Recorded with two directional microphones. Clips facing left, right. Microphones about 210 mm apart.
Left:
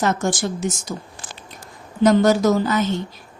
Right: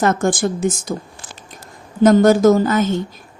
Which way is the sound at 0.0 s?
55° right (ahead or behind).